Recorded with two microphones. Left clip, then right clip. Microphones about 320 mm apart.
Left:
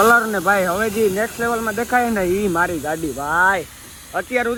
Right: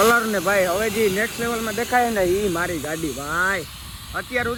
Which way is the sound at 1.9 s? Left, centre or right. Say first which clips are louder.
Even; left.